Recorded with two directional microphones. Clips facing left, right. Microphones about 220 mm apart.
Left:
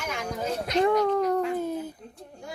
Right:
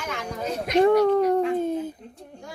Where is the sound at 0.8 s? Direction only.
35° right (ahead or behind).